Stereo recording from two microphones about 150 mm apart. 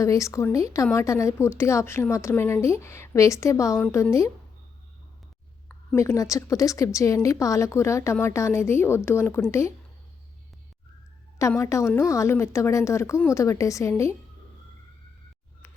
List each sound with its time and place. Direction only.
0.0 s speech: 20° left (ahead or behind)
6.0 s a woman's voice: 20° left (ahead or behind)
11.3 s speech: 20° left (ahead or behind)